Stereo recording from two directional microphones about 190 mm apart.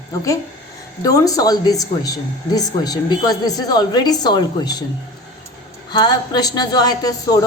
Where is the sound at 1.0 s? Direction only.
20° left (ahead or behind).